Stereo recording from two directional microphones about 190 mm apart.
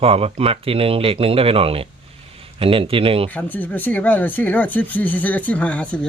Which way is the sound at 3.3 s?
10° left (ahead or behind).